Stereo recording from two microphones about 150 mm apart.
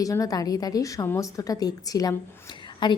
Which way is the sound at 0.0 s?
20° left (ahead or behind).